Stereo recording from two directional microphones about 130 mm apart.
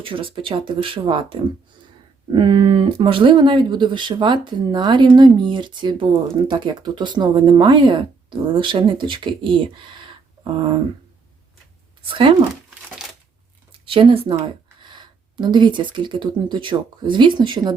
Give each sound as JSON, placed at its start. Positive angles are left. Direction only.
{"t": 0.0, "sound": "speech", "side_deg": -40}
{"t": 12.0, "sound": "speech", "side_deg": -40}
{"t": 13.8, "sound": "speech", "side_deg": -45}